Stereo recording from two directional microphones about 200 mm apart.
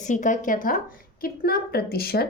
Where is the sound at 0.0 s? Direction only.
40° left (ahead or behind).